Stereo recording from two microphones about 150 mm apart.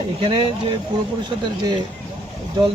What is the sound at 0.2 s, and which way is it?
Speech, 35° right (ahead or behind).